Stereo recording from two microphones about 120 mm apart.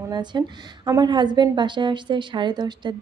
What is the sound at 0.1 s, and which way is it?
A woman's voice, 35° right (ahead or behind).